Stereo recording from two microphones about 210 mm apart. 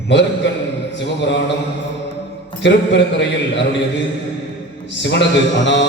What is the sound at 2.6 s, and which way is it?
Mantra, 60° left (ahead or behind).